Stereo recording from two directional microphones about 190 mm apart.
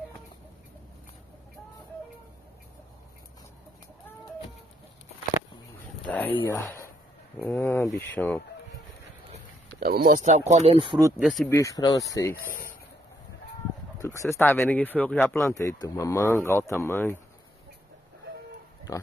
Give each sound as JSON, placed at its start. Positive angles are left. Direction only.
{"t": 6.0, "sound": "a sound", "side_deg": 10}
{"t": 7.4, "sound": "speech", "side_deg": 10}
{"t": 9.8, "sound": "speech", "side_deg": -55}
{"t": 10.2, "sound": "speech", "side_deg": -35}
{"t": 11.1, "sound": "speech", "side_deg": -5}
{"t": 11.4, "sound": "speech", "side_deg": 15}
{"t": 13.9, "sound": "speech", "side_deg": 15}
{"t": 18.9, "sound": "speech", "side_deg": 15}